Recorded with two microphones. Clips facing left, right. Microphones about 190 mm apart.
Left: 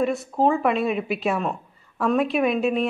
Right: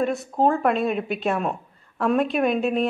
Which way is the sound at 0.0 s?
Centre (ahead or behind).